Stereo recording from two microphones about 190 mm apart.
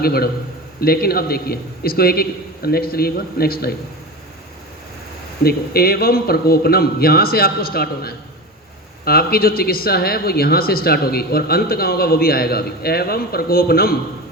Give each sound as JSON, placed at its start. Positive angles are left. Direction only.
{"t": 0.0, "sound": "a man's voice", "side_deg": 55}
{"t": 5.4, "sound": "speech", "side_deg": 55}